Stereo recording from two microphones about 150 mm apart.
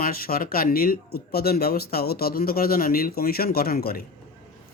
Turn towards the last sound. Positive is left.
turn(degrees=90)